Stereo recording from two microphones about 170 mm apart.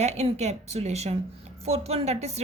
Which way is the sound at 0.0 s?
40° right (ahead or behind).